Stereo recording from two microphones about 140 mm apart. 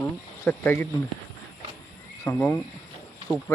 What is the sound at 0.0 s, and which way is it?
Cricket, 15° left (ahead or behind).